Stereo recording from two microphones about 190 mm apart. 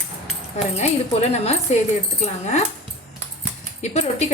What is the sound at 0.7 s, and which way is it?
Speech, 35° left (ahead or behind).